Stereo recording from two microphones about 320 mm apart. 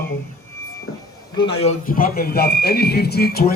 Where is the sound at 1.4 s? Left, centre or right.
Centre.